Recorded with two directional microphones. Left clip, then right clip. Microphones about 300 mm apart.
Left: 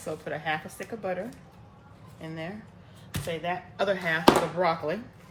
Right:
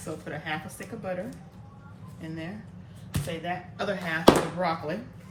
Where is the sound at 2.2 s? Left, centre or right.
Left.